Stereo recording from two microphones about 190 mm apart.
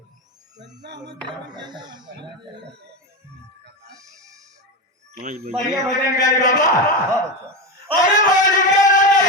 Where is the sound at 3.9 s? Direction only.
15° right (ahead or behind).